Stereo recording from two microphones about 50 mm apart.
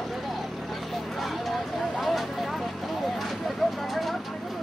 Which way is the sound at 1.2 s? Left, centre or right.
Centre.